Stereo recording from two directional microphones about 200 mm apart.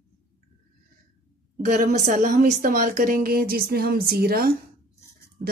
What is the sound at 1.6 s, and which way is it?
Speech, 40° right (ahead or behind).